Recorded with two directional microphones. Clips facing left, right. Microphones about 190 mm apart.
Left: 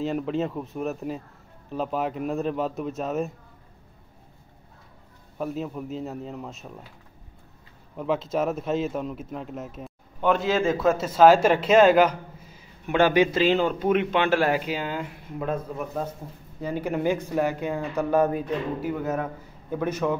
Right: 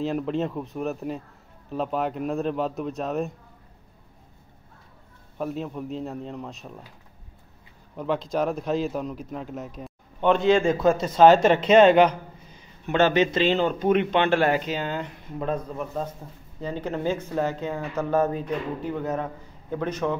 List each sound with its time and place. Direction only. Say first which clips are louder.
0.0 s a man's voice: even; centre (ahead or behind)
5.4 s a man's voice: even; centre (ahead or behind)
7.9 s a man's voice: even; centre (ahead or behind)